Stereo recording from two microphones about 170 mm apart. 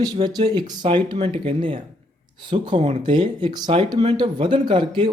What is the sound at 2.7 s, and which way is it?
Speech, 40° right (ahead or behind).